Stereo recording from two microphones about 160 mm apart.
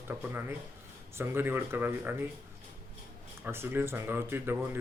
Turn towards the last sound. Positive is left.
turn(degrees=-15)  # may be behind; listen again after turning